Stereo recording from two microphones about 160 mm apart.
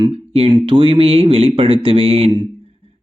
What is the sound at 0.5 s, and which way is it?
Speech, 30° right (ahead or behind).